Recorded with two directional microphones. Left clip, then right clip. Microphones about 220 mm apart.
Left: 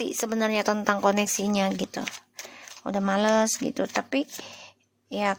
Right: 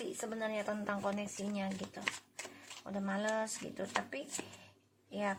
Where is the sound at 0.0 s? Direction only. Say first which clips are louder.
Left 13 dB; 45° left (ahead or behind).